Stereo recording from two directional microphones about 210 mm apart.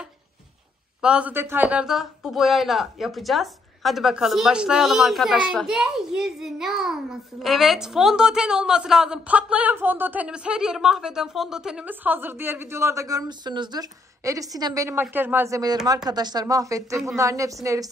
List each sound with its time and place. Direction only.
1.0 s speech: 5° right (ahead or behind)